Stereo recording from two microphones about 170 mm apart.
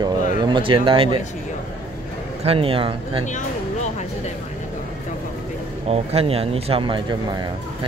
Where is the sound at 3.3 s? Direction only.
45° left (ahead or behind).